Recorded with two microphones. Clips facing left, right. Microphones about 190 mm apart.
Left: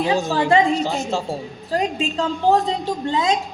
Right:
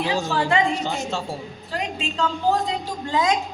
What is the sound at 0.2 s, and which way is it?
Speech, 15° left (ahead or behind).